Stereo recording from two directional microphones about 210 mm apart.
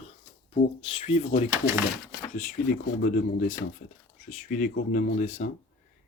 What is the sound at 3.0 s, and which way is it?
Speech, 40° left (ahead or behind).